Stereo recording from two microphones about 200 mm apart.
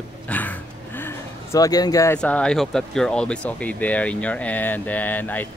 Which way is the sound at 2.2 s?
5° left (ahead or behind).